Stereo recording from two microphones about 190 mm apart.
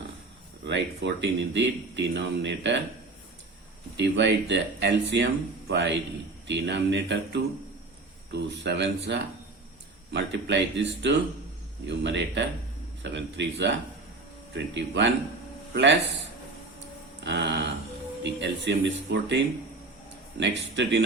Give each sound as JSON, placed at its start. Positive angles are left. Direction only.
{"t": 0.6, "sound": "speech", "side_deg": -65}
{"t": 3.9, "sound": "a man's voice", "side_deg": -70}
{"t": 17.2, "sound": "speech", "side_deg": -65}
{"t": 20.4, "sound": "speech", "side_deg": -70}